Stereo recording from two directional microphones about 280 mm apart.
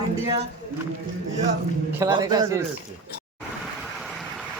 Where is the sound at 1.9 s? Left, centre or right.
Centre.